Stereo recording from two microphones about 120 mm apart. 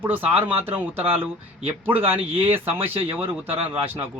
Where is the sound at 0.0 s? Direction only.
15° right (ahead or behind).